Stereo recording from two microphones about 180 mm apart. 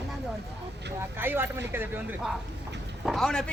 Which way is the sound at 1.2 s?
10° right (ahead or behind).